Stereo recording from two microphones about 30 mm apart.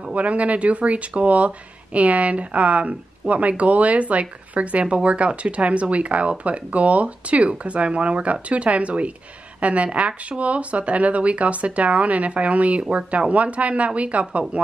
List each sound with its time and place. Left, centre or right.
0.1 s a woman's voice: right